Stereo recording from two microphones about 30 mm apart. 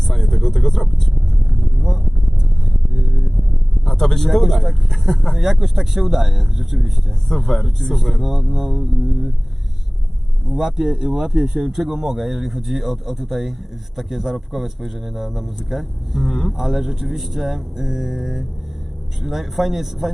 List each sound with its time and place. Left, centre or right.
0.1 s a sound: centre
1.6 s vehicle: centre
3.8 s vehicle: centre
4.3 s a man's voice: centre
5.0 s speech: centre
5.4 s speech: centre
7.3 s a man's voice: centre
10.5 s a man's voice: centre
16.3 s a sound: centre
16.6 s a man's voice: centre